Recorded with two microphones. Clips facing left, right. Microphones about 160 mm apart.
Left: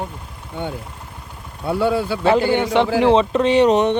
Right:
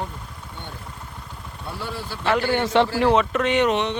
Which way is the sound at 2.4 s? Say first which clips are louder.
Left 3 dB; 15° left (ahead or behind).